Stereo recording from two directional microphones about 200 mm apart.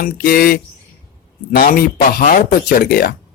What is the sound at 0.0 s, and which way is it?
Speech, 50° left (ahead or behind).